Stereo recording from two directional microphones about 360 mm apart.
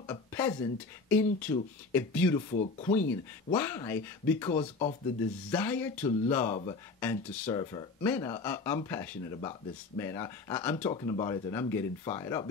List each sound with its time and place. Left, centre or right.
0.0 s a sound: centre
1.0 s speech: centre
2.5 s speech: centre
3.5 s speech: centre
5.5 s speech: centre